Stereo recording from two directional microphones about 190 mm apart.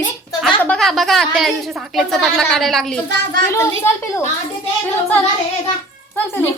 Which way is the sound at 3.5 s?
15° left (ahead or behind).